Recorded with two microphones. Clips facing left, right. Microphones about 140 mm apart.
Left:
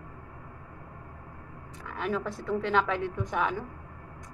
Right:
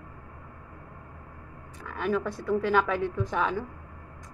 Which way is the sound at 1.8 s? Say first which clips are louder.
Right 3 dB; 25° left (ahead or behind).